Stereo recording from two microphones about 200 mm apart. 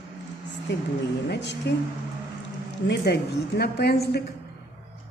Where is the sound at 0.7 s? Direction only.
60° left (ahead or behind).